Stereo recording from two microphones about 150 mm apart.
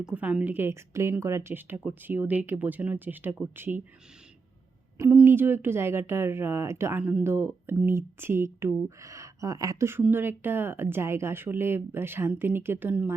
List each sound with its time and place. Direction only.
0.0 s speech: 10° right (ahead or behind)
4.9 s speech: 15° right (ahead or behind)